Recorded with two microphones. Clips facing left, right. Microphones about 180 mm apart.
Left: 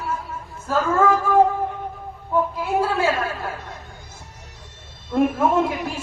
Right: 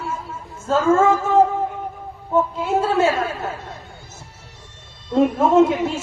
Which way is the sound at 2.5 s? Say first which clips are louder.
Right 3 dB; 25° right (ahead or behind).